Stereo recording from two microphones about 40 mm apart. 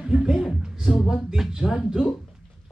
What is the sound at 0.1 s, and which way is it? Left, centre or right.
Speech, right.